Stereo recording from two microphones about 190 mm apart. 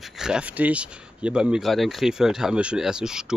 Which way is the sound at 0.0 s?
Centre (ahead or behind).